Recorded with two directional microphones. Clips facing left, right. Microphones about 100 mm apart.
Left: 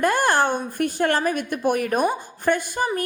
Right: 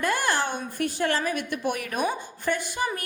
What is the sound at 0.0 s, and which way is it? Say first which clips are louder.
A woman's voice: left 6 dB; 50° left (ahead or behind).